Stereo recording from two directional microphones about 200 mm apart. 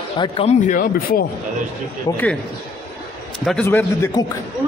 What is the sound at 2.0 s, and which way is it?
Speech, 10° left (ahead or behind).